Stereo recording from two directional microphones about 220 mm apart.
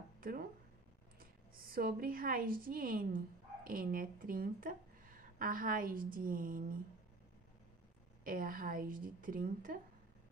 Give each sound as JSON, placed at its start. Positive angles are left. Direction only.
{"t": 1.2, "sound": "a woman's voice", "side_deg": -40}
{"t": 8.2, "sound": "a woman's voice", "side_deg": -40}